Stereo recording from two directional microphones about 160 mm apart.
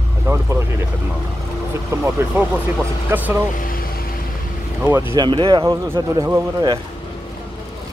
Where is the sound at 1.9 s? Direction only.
15° right (ahead or behind).